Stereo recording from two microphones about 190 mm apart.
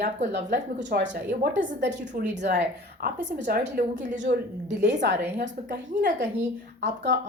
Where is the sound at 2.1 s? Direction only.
40° right (ahead or behind).